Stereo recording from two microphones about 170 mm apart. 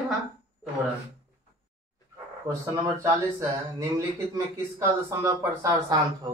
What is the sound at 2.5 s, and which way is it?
Speech, 20° right (ahead or behind).